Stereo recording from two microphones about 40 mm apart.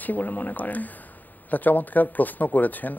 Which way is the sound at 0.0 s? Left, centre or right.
Left.